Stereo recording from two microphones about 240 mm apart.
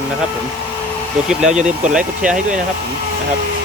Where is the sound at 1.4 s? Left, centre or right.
Right.